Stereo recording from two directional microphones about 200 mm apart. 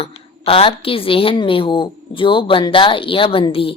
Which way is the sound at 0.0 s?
30° left (ahead or behind).